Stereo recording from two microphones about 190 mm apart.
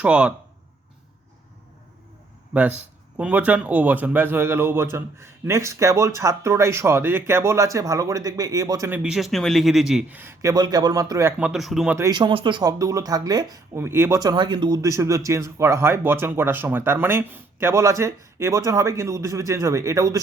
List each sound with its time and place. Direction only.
0.0 s a man's voice: 5° right (ahead or behind)
2.5 s speech: 10° right (ahead or behind)
9.0 s a man's voice: centre (ahead or behind)
11.9 s speech: 20° right (ahead or behind)